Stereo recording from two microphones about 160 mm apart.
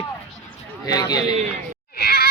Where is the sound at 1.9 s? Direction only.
75° left (ahead or behind).